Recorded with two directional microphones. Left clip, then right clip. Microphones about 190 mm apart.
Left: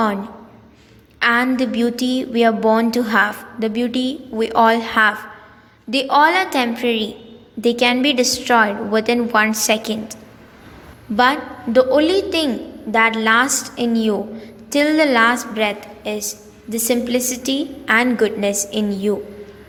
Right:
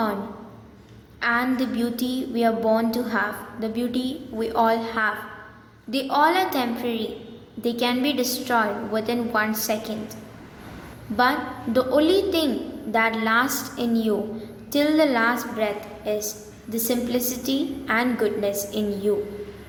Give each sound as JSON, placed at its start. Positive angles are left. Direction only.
{"t": 1.2, "sound": "a woman's voice", "side_deg": 40}
{"t": 11.2, "sound": "a woman's voice", "side_deg": 35}